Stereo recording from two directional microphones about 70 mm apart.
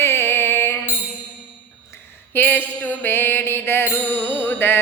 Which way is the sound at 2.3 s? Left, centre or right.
Left.